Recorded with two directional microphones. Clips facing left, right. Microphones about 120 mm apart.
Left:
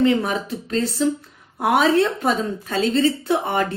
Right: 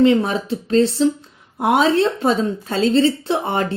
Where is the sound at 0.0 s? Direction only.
25° right (ahead or behind).